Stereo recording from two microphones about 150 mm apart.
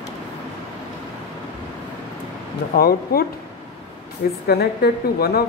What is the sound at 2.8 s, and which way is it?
Speech, 90° left.